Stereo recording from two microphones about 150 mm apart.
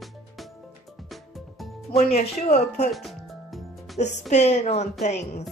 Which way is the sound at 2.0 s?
45° left (ahead or behind).